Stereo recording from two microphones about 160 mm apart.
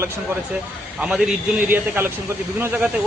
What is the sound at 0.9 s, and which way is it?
A man's voice, 5° right (ahead or behind).